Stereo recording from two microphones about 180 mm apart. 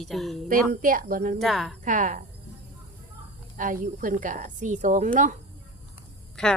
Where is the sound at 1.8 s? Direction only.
45° right (ahead or behind).